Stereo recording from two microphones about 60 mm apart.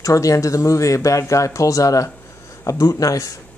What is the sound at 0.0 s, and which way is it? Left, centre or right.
Speech, left.